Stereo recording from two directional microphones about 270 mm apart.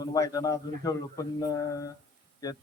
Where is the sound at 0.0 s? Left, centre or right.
Centre.